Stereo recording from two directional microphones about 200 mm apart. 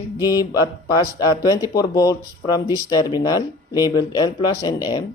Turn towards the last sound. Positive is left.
turn(degrees=20)  # may be behind; listen again after turning